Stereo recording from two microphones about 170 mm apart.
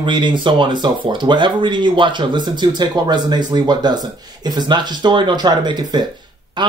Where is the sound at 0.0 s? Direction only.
25° right (ahead or behind).